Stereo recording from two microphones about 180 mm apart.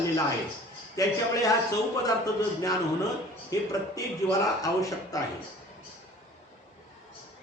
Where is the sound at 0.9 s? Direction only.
20° left (ahead or behind).